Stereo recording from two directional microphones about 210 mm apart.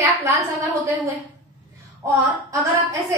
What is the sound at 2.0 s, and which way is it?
Speech, 15° right (ahead or behind).